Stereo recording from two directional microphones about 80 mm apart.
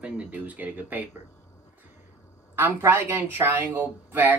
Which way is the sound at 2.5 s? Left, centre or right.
Right.